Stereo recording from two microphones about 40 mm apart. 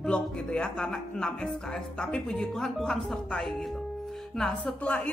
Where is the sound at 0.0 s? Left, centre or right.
Left.